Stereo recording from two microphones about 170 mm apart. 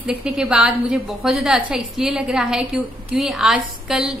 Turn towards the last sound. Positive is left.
turn(degrees=-5)  # may be behind; listen again after turning